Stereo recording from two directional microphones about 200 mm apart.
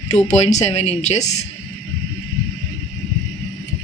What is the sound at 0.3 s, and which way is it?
Speech, 35° left (ahead or behind).